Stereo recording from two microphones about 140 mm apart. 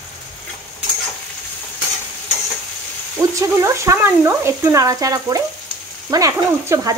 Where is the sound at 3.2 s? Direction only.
20° right (ahead or behind).